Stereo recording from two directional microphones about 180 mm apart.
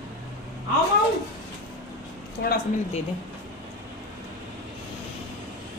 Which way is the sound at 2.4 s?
60° left (ahead or behind).